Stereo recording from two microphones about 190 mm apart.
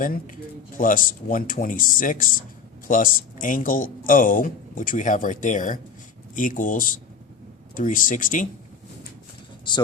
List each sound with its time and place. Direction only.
0.0 s speech: 45° left (ahead or behind)